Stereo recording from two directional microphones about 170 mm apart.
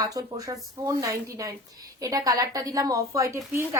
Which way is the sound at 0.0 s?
20° right (ahead or behind).